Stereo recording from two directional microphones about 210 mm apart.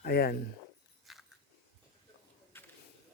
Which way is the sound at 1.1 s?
Centre (ahead or behind).